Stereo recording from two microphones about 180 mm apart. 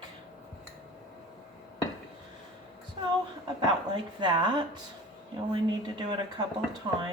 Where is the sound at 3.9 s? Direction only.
25° right (ahead or behind).